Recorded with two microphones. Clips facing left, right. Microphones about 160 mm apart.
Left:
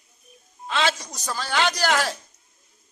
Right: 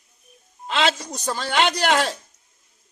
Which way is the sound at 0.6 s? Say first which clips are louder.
Right 2 dB; 25° right (ahead or behind).